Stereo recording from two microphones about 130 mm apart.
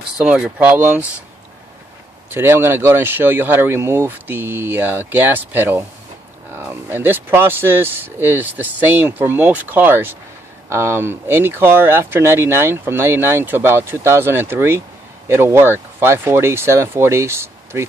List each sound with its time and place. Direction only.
0.2 s speech: 5° right (ahead or behind)
2.2 s speech: 15° right (ahead or behind)